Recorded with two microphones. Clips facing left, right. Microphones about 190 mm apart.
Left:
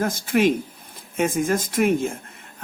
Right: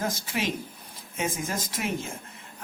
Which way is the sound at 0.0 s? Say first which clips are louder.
Left 10 dB; 55° left (ahead or behind).